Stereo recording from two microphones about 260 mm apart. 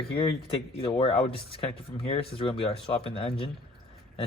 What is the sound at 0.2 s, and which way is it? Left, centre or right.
Speech, left.